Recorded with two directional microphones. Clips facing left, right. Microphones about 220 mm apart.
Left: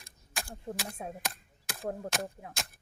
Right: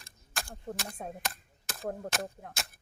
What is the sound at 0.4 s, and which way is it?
Speech, 5° left (ahead or behind).